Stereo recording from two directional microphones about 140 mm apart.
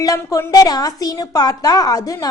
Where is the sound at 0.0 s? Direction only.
25° left (ahead or behind).